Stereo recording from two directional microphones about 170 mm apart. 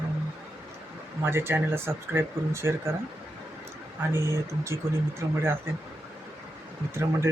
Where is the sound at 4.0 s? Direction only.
15° right (ahead or behind).